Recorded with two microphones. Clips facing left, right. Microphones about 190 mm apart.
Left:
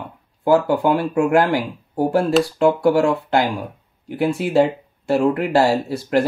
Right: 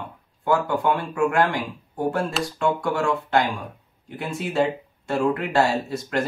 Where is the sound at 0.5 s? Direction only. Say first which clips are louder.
Left 6 dB; 35° left (ahead or behind).